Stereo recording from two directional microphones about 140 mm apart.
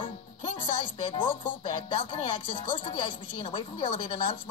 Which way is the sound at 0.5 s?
35° left (ahead or behind).